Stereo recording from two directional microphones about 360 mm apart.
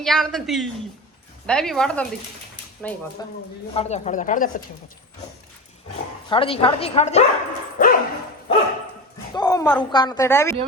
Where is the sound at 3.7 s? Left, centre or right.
Centre.